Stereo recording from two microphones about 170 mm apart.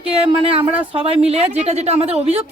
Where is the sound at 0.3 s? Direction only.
35° right (ahead or behind).